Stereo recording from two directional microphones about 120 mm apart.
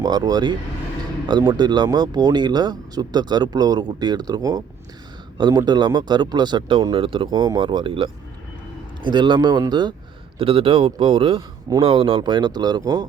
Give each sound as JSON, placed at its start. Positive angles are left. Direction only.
{"t": 0.0, "sound": "speech", "side_deg": -35}
{"t": 10.3, "sound": "a man's voice", "side_deg": -50}